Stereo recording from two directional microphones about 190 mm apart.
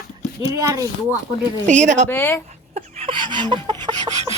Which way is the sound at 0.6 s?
15° right (ahead or behind).